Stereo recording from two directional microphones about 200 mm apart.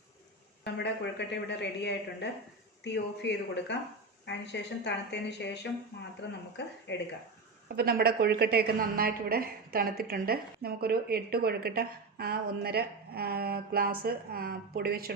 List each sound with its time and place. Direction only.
0.6 s speech: 60° left (ahead or behind)
7.8 s a woman's voice: 50° right (ahead or behind)